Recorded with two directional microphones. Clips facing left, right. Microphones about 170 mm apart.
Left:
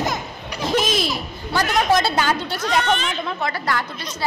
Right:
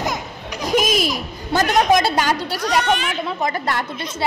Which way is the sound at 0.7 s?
10° right (ahead or behind).